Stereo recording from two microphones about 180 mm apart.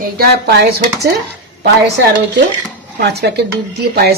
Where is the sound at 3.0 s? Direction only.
65° right (ahead or behind).